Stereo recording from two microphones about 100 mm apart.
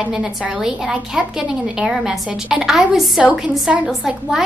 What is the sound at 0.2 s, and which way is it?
A woman's voice, 5° right (ahead or behind).